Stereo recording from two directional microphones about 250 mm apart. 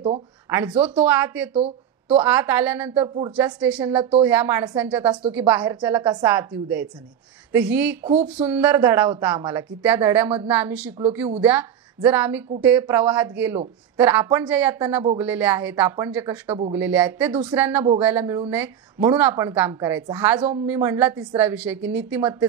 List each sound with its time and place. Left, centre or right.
0.5 s a woman's voice: centre
8.0 s speech: right
8.5 s a woman's voice: centre
16.4 s speech: right
16.7 s a woman's voice: centre